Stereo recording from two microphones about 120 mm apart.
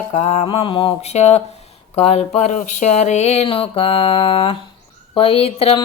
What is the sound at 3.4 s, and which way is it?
Mantra, 50° left (ahead or behind).